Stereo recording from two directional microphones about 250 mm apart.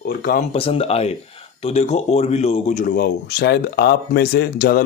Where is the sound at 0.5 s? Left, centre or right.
Left.